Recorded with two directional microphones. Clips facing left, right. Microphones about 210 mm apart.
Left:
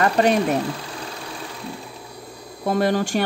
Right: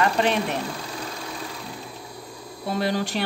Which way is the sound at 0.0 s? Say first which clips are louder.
Left 4 dB; 45° left (ahead or behind).